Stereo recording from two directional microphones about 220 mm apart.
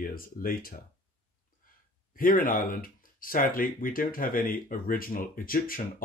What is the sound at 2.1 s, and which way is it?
Speech, 40° left (ahead or behind).